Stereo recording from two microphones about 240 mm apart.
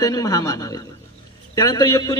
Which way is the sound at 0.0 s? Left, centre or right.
Centre.